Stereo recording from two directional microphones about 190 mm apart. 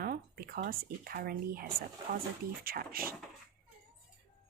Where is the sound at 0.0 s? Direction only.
50° right (ahead or behind).